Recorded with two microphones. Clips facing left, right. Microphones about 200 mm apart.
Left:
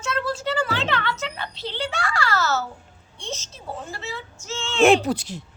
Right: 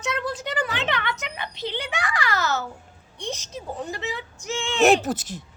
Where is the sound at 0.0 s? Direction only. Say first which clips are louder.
Left 2 dB; 15° right (ahead or behind).